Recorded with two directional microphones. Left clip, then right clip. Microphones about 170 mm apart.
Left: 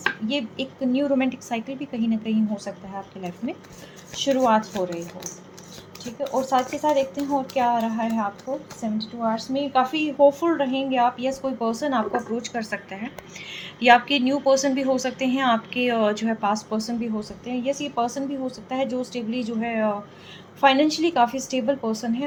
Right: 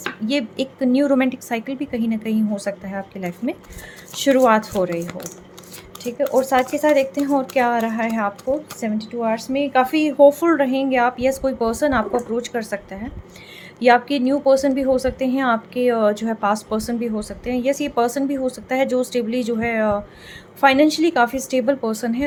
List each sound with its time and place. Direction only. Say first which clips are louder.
0.3 s a woman's voice: right 5 dB; 50° right (ahead or behind)
6.3 s a woman's voice: right 4 dB; 55° right (ahead or behind)